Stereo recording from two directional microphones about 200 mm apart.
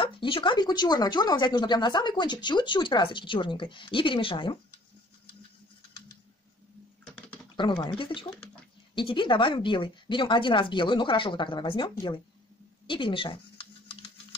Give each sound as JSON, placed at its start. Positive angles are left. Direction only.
{"t": 0.0, "sound": "speech", "side_deg": 25}
{"t": 7.5, "sound": "speech", "side_deg": 25}
{"t": 12.8, "sound": "a sound", "side_deg": 25}